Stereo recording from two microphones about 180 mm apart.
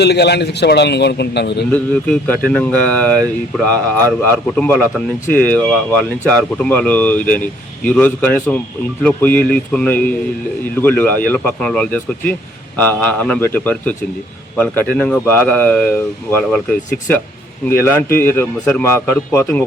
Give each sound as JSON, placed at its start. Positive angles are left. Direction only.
{"t": 0.0, "sound": "a man's voice", "side_deg": 65}
{"t": 1.7, "sound": "speech", "side_deg": 10}
{"t": 17.7, "sound": "speech", "side_deg": 15}